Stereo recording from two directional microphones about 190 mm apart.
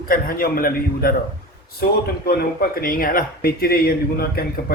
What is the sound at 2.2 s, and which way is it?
Speech, 50° left (ahead or behind).